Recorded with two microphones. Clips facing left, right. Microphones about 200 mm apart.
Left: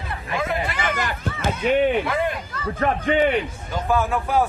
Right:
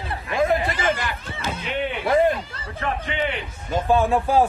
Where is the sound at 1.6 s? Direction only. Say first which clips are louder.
Left 11 dB; 45° left (ahead or behind).